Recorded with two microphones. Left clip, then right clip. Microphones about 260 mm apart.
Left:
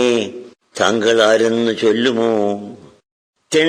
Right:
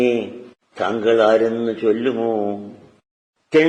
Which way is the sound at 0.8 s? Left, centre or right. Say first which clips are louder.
Left 3 dB; left.